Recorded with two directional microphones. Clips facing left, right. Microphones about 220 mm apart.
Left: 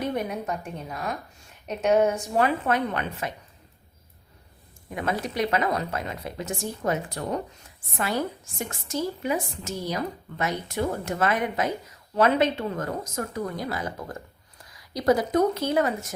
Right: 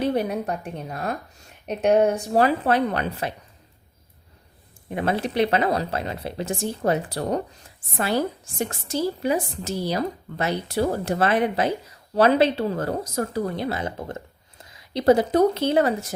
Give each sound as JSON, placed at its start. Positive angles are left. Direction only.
{"t": 0.0, "sound": "a woman's voice", "side_deg": -35}
{"t": 4.9, "sound": "a woman's voice", "side_deg": -30}